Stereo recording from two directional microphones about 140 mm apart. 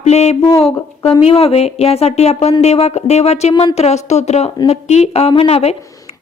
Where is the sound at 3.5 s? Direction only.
30° left (ahead or behind).